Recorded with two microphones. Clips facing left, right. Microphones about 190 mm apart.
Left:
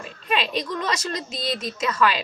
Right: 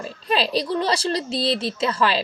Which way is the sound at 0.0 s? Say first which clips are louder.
Right 3 dB; 35° right (ahead or behind).